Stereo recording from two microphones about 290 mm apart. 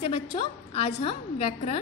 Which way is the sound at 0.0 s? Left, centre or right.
Centre.